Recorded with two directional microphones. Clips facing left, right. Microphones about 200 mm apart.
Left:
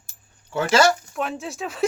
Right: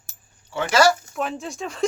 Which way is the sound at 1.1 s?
Centre (ahead or behind).